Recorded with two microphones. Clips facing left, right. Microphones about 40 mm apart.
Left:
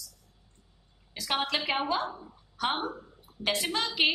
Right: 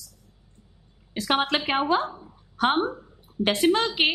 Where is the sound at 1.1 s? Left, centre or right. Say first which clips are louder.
Right 6 dB; right.